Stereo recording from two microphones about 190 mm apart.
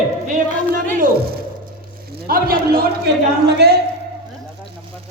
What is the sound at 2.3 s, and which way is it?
A man's voice, 50° right (ahead or behind).